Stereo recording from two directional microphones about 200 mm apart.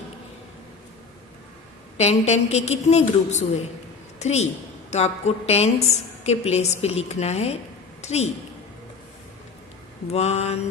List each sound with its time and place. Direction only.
2.0 s a woman's voice: 35° left (ahead or behind)
10.0 s a woman's voice: 30° left (ahead or behind)